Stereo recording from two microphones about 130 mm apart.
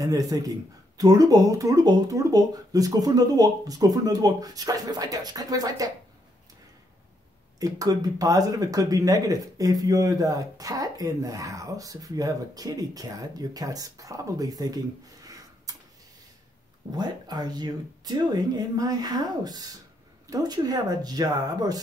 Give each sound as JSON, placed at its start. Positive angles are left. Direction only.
{"t": 0.0, "sound": "speech", "side_deg": -25}
{"t": 7.5, "sound": "speech", "side_deg": -25}
{"t": 16.9, "sound": "speech", "side_deg": -30}